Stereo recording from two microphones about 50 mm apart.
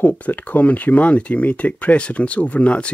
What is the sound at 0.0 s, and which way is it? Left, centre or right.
Speech, left.